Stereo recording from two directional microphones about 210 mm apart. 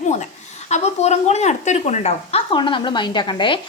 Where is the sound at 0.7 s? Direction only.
30° left (ahead or behind).